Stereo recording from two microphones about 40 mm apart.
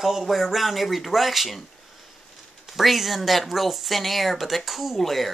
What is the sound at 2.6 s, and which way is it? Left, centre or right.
Speech, centre.